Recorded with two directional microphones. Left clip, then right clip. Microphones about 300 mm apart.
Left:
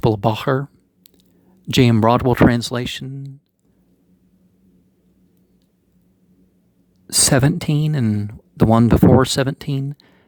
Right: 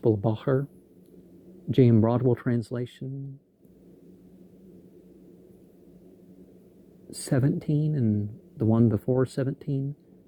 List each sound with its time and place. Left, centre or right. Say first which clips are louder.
0.0 s speech: left 7 dB; left
1.7 s speech: left 8 dB; left
7.3 s speech: left 7 dB; left